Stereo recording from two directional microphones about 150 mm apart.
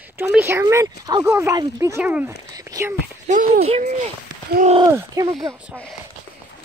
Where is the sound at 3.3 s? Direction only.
65° right (ahead or behind).